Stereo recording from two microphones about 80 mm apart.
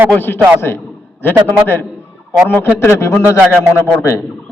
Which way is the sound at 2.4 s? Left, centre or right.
Left.